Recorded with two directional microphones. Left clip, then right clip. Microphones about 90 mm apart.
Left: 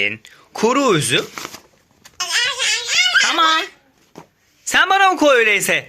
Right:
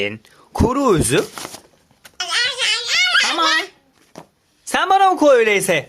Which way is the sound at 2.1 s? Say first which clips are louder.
Even; 30° right (ahead or behind).